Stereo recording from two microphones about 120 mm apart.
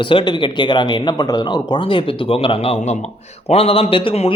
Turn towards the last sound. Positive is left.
turn(degrees=55)  # may be behind; listen again after turning